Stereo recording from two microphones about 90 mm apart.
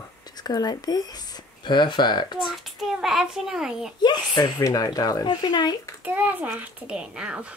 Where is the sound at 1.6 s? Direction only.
60° left (ahead or behind).